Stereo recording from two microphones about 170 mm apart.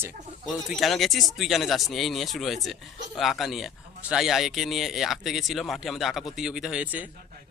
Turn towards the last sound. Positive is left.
turn(degrees=-10)  # may be behind; listen again after turning